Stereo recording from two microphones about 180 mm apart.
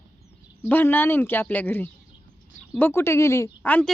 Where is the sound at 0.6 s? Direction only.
10° left (ahead or behind).